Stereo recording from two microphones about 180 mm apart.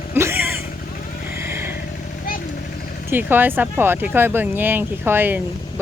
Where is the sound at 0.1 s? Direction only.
15° right (ahead or behind).